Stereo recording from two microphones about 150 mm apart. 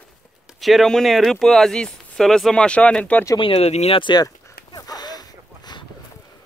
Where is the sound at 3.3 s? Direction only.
40° left (ahead or behind).